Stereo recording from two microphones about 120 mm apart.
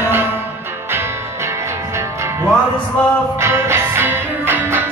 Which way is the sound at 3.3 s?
20° right (ahead or behind).